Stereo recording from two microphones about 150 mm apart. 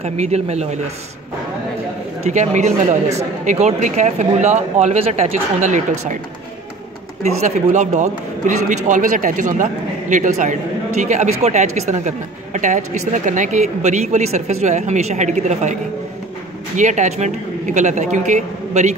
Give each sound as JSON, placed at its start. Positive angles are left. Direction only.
{"t": 0.0, "sound": "a man's voice", "side_deg": -45}
{"t": 2.2, "sound": "a man's voice", "side_deg": -50}
{"t": 7.4, "sound": "a man's voice", "side_deg": -50}